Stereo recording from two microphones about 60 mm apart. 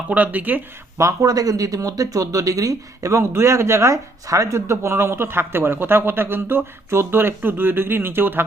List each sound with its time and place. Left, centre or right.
0.1 s speech: right
0.9 s speech: right